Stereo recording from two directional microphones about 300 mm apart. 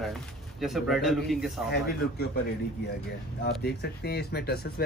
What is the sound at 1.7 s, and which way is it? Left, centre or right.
Speech, left.